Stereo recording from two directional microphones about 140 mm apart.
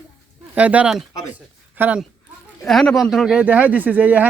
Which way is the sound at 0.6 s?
10° right (ahead or behind).